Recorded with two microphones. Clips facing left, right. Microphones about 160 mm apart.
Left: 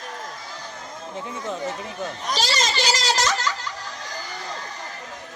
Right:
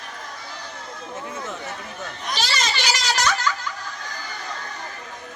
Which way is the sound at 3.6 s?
35° left (ahead or behind).